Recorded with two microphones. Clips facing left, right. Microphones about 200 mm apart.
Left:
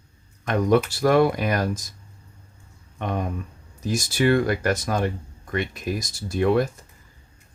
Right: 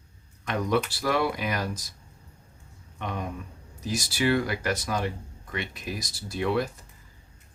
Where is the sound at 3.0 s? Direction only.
50° left (ahead or behind).